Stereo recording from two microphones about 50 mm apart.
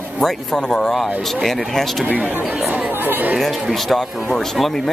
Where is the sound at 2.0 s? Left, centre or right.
Right.